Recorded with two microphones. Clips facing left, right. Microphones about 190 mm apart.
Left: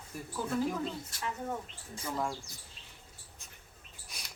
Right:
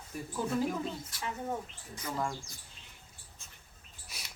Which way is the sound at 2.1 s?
5° left (ahead or behind).